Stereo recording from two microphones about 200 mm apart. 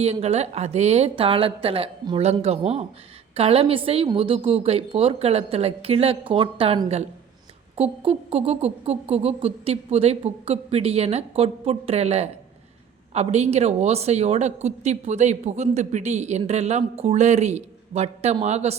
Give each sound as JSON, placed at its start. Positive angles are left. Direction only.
{"t": 0.0, "sound": "a woman's voice", "side_deg": -30}